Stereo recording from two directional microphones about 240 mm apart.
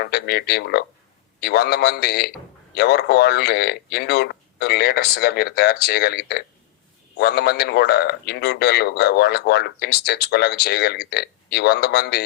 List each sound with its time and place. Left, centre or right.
0.0 s a man's voice: left